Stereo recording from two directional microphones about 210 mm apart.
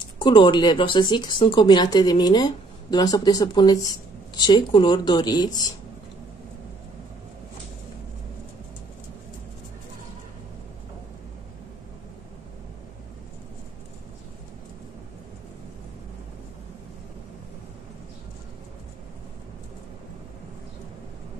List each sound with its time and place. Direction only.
0.2 s speech: 20° left (ahead or behind)